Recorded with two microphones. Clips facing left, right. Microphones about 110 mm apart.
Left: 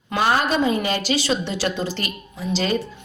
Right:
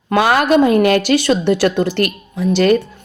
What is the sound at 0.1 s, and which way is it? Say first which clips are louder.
A woman's voice: right 7 dB; 70° right (ahead or behind).